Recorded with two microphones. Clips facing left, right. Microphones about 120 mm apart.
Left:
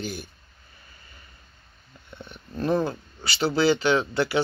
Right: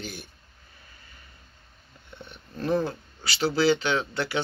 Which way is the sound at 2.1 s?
Centre (ahead or behind).